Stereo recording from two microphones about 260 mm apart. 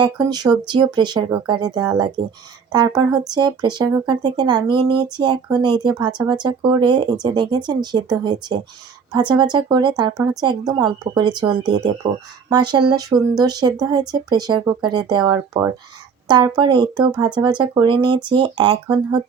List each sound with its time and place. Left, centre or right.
0.0 s speech: centre